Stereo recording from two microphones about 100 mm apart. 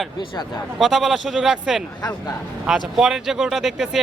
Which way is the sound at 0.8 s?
5° right (ahead or behind).